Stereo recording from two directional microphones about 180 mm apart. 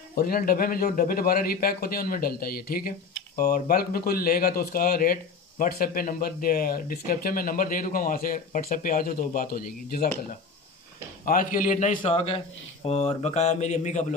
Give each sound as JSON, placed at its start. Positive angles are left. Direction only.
{"t": 0.1, "sound": "a man's voice", "side_deg": 55}
{"t": 11.2, "sound": "a man's voice", "side_deg": 50}
{"t": 12.0, "sound": "speech", "side_deg": 35}